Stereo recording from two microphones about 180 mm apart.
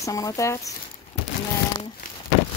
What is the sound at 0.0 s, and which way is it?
Speech, 20° left (ahead or behind).